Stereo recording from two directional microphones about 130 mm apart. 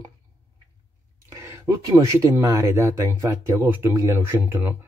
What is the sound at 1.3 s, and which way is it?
Speech, 20° right (ahead or behind).